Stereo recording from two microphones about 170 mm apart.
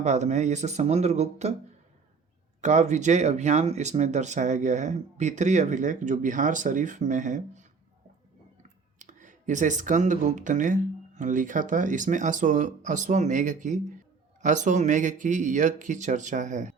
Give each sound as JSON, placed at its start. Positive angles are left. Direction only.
{"t": 0.0, "sound": "speech", "side_deg": -45}
{"t": 2.6, "sound": "speech", "side_deg": -45}
{"t": 9.0, "sound": "speech", "side_deg": -45}